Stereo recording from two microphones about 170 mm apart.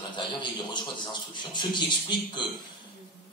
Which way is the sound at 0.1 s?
25° left (ahead or behind).